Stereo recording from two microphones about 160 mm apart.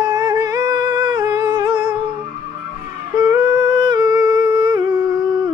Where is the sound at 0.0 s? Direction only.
25° right (ahead or behind).